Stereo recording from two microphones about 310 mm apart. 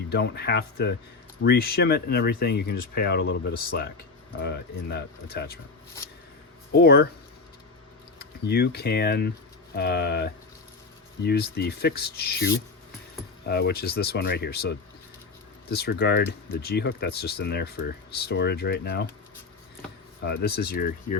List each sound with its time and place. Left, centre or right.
0.1 s speech: left
6.7 s speech: left
8.2 s speech: left
20.2 s speech: left